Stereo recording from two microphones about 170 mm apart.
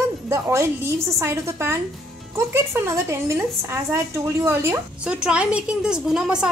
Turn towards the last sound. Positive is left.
turn(degrees=-5)  # may be behind; listen again after turning